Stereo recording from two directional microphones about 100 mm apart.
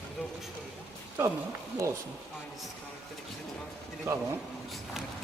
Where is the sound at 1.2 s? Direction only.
30° right (ahead or behind).